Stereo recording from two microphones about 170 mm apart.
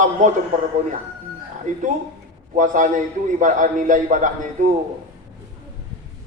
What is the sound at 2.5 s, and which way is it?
A man's voice, 50° right (ahead or behind).